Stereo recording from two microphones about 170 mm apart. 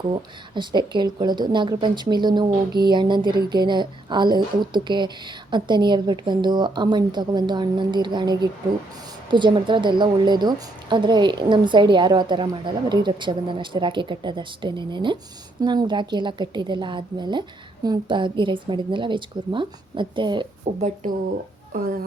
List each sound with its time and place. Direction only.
0.1 s a woman's voice: 25° right (ahead or behind)
20.7 s a woman's voice: 45° right (ahead or behind)